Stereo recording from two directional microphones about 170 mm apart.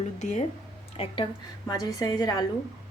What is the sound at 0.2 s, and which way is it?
Speech, 45° left (ahead or behind).